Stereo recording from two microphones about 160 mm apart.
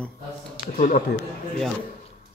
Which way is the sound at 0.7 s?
55° left (ahead or behind).